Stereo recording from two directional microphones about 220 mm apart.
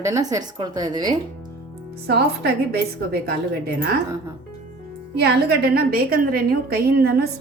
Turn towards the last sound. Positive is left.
turn(degrees=-45)  # may be behind; listen again after turning